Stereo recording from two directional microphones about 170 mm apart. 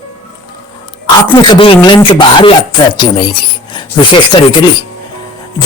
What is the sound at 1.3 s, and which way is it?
Speech, 30° left (ahead or behind).